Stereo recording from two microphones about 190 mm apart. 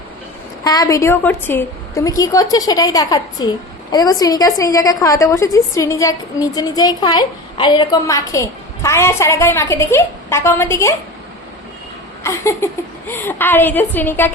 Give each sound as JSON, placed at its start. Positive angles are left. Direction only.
{"t": 0.6, "sound": "a woman's voice", "side_deg": 20}
{"t": 12.2, "sound": "a woman's voice", "side_deg": 15}